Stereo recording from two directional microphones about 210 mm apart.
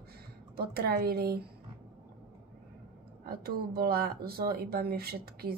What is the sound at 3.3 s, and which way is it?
Speech, 45° right (ahead or behind).